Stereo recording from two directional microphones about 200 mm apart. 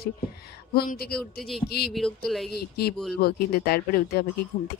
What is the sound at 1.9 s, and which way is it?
Speech, 5° left (ahead or behind).